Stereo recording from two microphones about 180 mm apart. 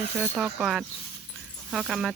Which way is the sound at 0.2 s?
5° right (ahead or behind).